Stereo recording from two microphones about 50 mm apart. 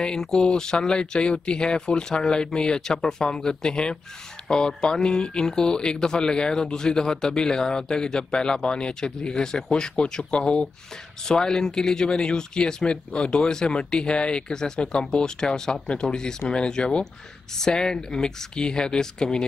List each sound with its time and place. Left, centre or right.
0.0 s speech: centre